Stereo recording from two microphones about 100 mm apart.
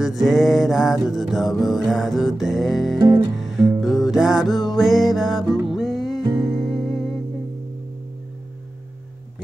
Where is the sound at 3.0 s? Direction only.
45° right (ahead or behind).